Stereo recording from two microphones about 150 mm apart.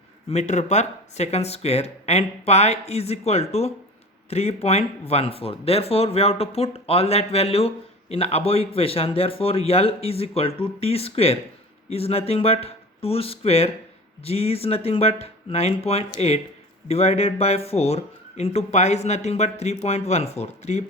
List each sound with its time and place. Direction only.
0.3 s speech: 50° left (ahead or behind)